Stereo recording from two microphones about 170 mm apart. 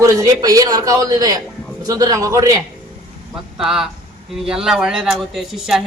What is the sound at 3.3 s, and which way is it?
A man's voice, 5° right (ahead or behind).